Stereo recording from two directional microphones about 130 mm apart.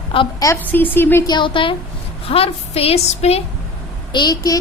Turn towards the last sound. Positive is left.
turn(degrees=35)  # may be behind; listen again after turning